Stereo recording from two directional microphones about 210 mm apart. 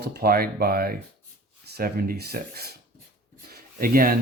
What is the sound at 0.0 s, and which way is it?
Speech, 50° right (ahead or behind).